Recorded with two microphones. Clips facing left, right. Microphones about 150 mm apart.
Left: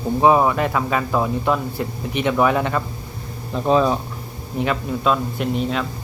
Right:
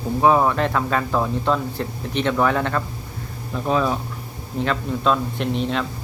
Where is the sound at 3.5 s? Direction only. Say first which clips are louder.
Left 4 dB; 30° left (ahead or behind).